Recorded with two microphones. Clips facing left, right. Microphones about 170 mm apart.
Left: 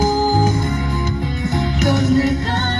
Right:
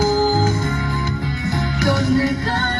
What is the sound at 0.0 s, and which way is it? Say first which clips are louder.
Music: left 1 dB; 20° left (ahead or behind).